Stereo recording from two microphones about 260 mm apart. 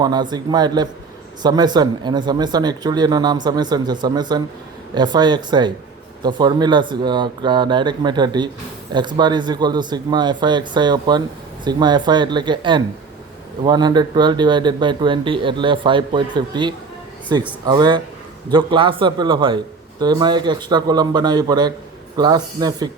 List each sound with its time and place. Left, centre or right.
0.0 s speech: centre